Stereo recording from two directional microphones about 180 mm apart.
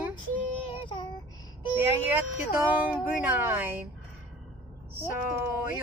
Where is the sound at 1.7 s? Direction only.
10° right (ahead or behind).